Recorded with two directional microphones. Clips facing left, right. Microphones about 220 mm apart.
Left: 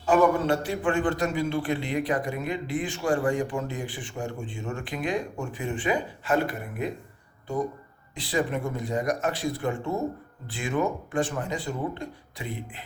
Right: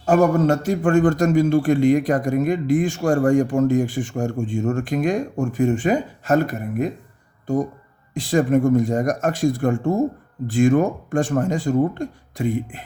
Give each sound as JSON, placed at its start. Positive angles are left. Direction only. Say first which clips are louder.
{"t": 0.0, "sound": "a man's voice", "louder": "right 5 dB", "side_deg": -45}